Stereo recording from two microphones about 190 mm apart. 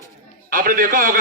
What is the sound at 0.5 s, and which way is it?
Speech, 50° right (ahead or behind).